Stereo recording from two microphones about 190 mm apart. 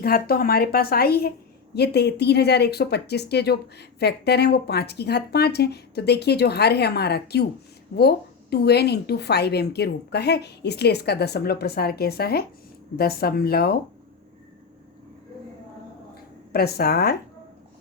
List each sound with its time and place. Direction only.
0.0 s a woman's voice: 50° left (ahead or behind)
16.5 s speech: 55° left (ahead or behind)